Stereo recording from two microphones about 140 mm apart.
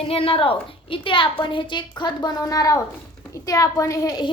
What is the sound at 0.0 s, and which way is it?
A woman's voice, 40° left (ahead or behind).